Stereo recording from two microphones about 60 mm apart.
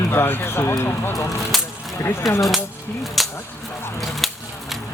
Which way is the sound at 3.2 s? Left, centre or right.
Centre.